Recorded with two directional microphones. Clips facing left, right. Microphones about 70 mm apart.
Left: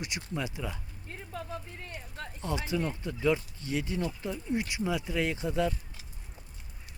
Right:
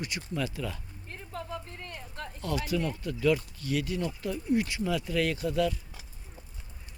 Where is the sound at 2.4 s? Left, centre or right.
Left.